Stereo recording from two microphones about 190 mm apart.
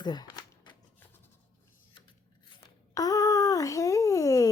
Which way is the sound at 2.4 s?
20° left (ahead or behind).